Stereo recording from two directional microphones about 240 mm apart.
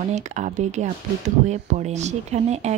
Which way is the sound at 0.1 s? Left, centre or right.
Right.